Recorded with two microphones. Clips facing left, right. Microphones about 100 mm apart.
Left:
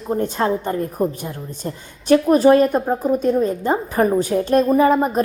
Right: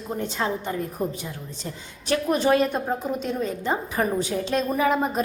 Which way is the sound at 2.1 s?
40° left (ahead or behind).